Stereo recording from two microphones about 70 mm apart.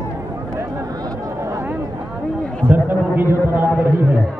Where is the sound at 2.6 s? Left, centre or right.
Right.